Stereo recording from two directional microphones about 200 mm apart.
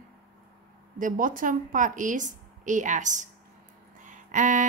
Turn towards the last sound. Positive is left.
turn(degrees=-40)  # may be behind; listen again after turning